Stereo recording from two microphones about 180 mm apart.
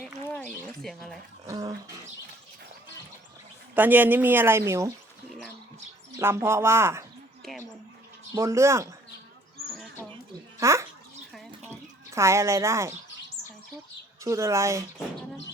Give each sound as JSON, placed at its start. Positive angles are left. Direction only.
{"t": 0.3, "sound": "a sound", "side_deg": 5}
{"t": 1.5, "sound": "a sound", "side_deg": -20}
{"t": 3.8, "sound": "speech", "side_deg": -10}
{"t": 5.3, "sound": "bird", "side_deg": 0}
{"t": 6.1, "sound": "speech", "side_deg": -15}
{"t": 8.4, "sound": "speech", "side_deg": -15}
{"t": 10.6, "sound": "speech", "side_deg": -15}
{"t": 12.1, "sound": "speech", "side_deg": -15}
{"t": 14.3, "sound": "speech", "side_deg": -15}